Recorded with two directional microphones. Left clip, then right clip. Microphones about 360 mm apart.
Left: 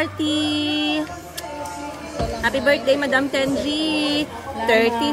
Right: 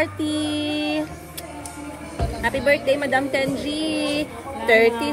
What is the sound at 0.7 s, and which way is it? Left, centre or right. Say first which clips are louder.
Music: left 3 dB; left.